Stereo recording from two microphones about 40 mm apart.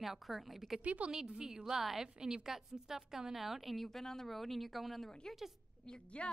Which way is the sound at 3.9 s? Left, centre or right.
Centre.